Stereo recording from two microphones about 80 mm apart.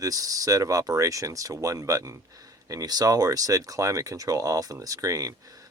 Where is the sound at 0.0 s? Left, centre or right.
Right.